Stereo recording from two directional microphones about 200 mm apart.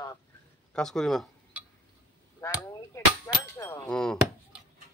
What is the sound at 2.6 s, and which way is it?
Hammer, 15° left (ahead or behind).